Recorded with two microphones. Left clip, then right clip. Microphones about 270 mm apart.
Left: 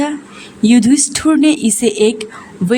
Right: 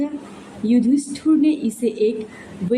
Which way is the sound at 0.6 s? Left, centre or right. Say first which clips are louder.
Left 7 dB; left.